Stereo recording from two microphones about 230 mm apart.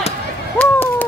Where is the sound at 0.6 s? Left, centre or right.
Centre.